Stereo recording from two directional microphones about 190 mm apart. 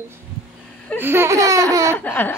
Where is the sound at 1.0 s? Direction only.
10° right (ahead or behind).